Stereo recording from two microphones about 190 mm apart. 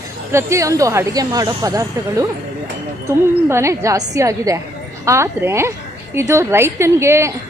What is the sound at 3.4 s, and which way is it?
A woman's voice, 15° right (ahead or behind).